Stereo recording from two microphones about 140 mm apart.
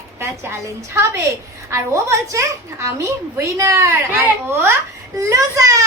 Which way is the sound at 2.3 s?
20° right (ahead or behind).